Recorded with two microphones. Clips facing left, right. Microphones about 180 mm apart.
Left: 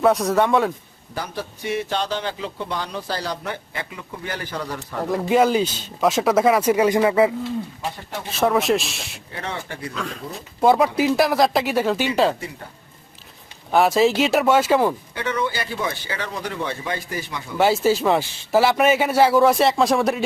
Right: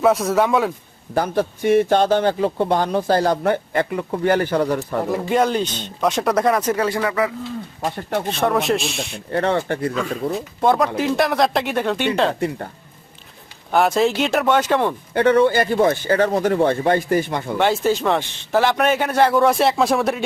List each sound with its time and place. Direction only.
0.0 s speech: centre (ahead or behind)
1.1 s a man's voice: 50° right (ahead or behind)
5.1 s speech: 5° left (ahead or behind); by 7.3 s 25° left (ahead or behind)
8.3 s speech: 5° left (ahead or behind)
9.3 s speech: 60° right (ahead or behind)
10.3 s speech: 5° left (ahead or behind)
13.7 s speech: centre (ahead or behind)
15.1 s a man's voice: 55° right (ahead or behind)
17.6 s speech: 5° left (ahead or behind)